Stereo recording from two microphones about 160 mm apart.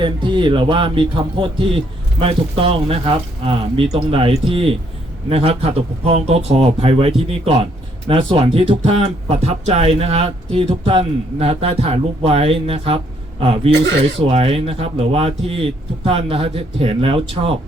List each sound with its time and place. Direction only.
0.0 s speech: 30° right (ahead or behind)